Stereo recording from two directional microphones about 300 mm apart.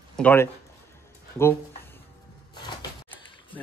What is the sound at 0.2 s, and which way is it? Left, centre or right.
Speech, centre.